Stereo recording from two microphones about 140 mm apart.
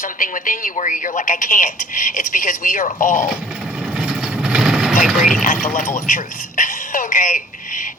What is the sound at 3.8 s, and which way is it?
Vehicle, 5° right (ahead or behind).